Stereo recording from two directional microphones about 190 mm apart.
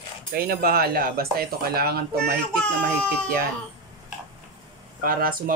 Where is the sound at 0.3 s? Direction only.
55° right (ahead or behind).